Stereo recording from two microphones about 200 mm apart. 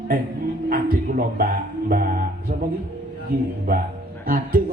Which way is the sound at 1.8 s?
45° right (ahead or behind).